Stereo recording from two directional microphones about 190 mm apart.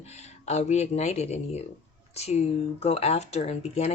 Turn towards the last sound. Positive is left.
turn(degrees=35)  # may be behind; listen again after turning